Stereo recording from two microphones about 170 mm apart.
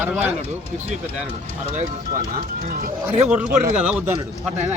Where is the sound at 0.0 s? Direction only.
10° right (ahead or behind).